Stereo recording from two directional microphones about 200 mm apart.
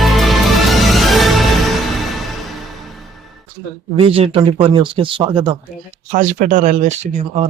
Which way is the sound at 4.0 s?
30° right (ahead or behind).